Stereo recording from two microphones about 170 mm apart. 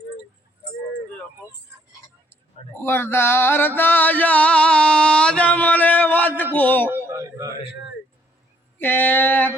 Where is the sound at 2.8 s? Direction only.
15° left (ahead or behind).